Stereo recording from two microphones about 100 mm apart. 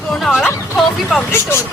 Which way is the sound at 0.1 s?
Centre (ahead or behind).